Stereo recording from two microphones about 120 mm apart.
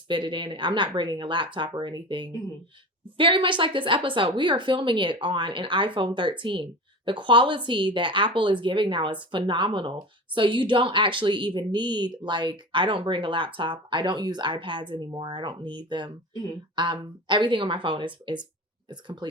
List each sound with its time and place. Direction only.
0.1 s a woman's voice: 40° right (ahead or behind)